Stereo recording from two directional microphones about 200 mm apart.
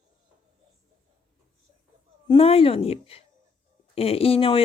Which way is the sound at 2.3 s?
30° left (ahead or behind).